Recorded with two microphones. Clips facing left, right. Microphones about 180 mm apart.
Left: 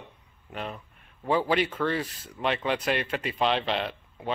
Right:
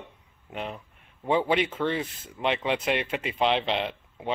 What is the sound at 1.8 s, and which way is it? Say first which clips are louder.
Speech: even; 20° right (ahead or behind).